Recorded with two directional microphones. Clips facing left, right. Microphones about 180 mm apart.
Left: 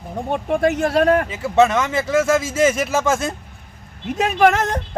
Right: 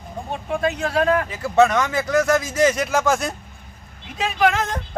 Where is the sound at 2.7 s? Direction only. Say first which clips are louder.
Left 1 dB; 5° left (ahead or behind).